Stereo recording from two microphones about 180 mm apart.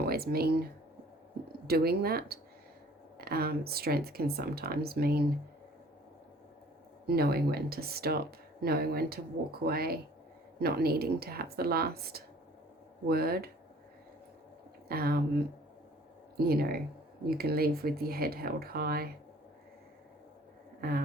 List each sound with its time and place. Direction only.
0.0 s speech: 60° right (ahead or behind)
7.1 s speech: 60° right (ahead or behind)
14.8 s speech: 60° right (ahead or behind)
16.4 s speech: 60° right (ahead or behind)
20.8 s speech: 55° right (ahead or behind)